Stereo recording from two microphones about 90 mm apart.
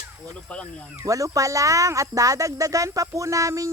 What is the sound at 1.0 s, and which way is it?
Speech, 40° right (ahead or behind).